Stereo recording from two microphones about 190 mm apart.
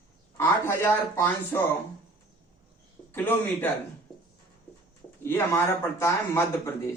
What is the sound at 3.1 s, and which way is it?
Speech, 10° left (ahead or behind).